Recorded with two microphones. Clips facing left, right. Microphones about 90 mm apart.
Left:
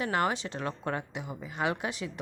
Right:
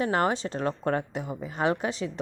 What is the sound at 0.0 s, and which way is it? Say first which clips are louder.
A woman's voice: right 4 dB; 35° right (ahead or behind).